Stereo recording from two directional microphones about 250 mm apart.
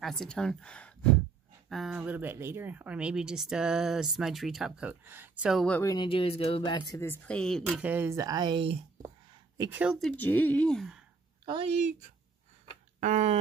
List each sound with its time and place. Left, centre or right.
0.0 s speech: centre
9.6 s speech: centre
11.4 s speech: right
13.0 s speech: right